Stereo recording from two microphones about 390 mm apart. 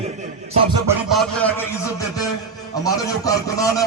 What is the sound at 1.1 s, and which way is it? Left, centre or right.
Speech, centre.